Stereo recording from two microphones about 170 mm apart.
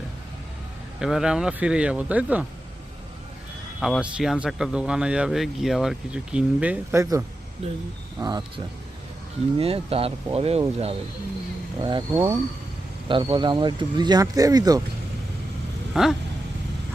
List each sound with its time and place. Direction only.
0.9 s speech: 5° right (ahead or behind)
3.8 s speech: centre (ahead or behind); by 10.6 s 35° right (ahead or behind)
11.8 s speech: 25° right (ahead or behind)
12.1 s speech: 15° right (ahead or behind)
13.1 s speech: 30° right (ahead or behind)
15.9 s vehicle: centre (ahead or behind)